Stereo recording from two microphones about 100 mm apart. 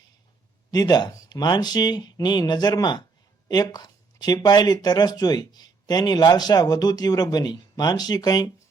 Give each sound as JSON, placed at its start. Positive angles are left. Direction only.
{"t": 0.7, "sound": "speech", "side_deg": 45}